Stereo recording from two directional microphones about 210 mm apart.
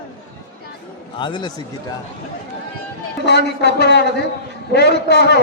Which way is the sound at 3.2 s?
50° left (ahead or behind).